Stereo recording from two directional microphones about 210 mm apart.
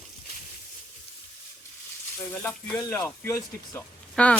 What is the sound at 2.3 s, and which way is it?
Speech, 10° left (ahead or behind).